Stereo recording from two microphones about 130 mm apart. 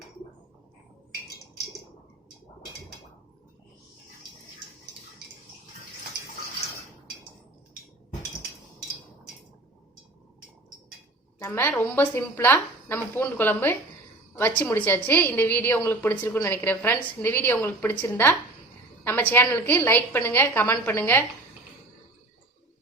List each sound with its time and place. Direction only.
11.4 s a woman's voice: 15° left (ahead or behind)